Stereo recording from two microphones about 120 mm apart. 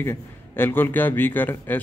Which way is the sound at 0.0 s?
15° left (ahead or behind).